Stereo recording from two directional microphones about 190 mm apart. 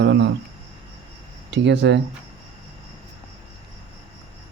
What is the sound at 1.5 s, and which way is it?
Speech, 70° right (ahead or behind).